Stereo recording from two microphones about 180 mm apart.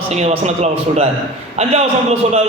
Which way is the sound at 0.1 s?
35° right (ahead or behind).